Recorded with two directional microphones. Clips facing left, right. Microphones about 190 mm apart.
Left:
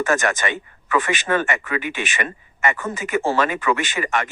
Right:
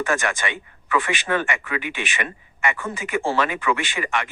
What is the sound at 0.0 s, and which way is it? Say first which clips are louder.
Speech: left 3 dB; 45° left (ahead or behind).